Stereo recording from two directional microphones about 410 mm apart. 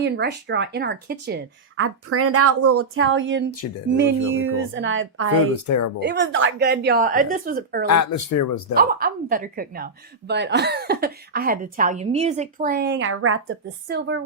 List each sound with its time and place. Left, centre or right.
0.0 s a woman's voice: right
5.6 s speech: left
6.0 s a woman's voice: right
7.9 s speech: left
8.7 s a woman's voice: right